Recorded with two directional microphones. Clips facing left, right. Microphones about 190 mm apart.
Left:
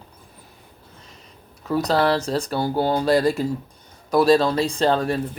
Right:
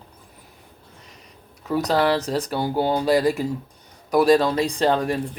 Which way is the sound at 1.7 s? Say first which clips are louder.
Even; 15° right (ahead or behind).